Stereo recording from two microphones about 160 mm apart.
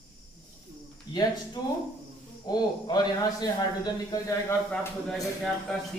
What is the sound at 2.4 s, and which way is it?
A man's voice, 25° left (ahead or behind).